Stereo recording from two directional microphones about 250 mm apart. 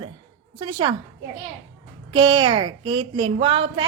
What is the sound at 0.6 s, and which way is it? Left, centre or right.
Speech, centre.